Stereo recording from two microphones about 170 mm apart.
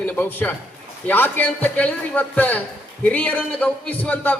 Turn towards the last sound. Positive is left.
turn(degrees=10)  # may be behind; listen again after turning